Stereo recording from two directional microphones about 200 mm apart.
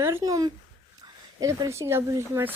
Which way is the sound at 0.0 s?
15° right (ahead or behind).